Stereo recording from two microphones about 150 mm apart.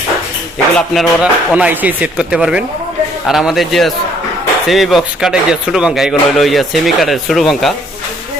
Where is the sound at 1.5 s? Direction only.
10° right (ahead or behind).